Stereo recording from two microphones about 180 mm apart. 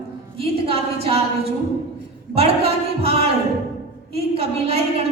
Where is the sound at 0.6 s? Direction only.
35° right (ahead or behind).